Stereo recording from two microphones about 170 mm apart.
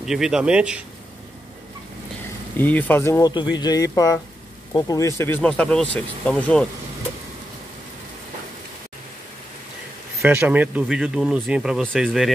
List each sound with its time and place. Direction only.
0.0 s speech: 5° right (ahead or behind)
2.5 s speech: 10° left (ahead or behind)
10.2 s speech: 10° right (ahead or behind)